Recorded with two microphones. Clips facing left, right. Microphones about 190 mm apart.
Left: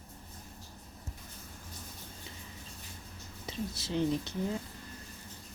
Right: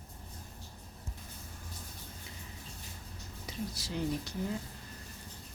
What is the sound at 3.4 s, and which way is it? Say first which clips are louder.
Speech: left 2 dB; 25° left (ahead or behind).